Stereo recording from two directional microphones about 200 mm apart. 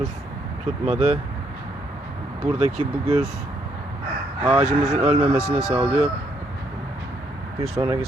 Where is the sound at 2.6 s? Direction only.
35° right (ahead or behind).